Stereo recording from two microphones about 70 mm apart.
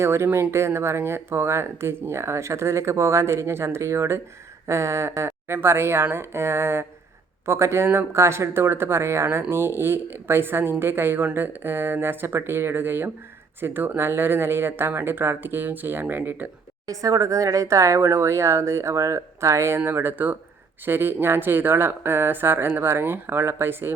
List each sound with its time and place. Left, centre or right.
0.0 s speech: right
16.8 s speech: right